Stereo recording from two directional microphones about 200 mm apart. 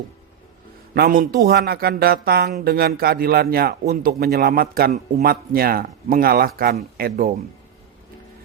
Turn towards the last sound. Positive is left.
turn(degrees=-50)  # may be behind; listen again after turning